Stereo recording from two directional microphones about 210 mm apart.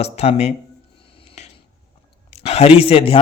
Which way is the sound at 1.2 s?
25° left (ahead or behind).